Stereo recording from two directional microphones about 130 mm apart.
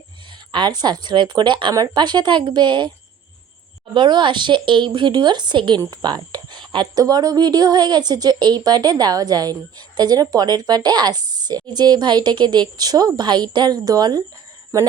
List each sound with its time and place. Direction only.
0.5 s speech: 35° right (ahead or behind)
3.9 s speech: 35° right (ahead or behind)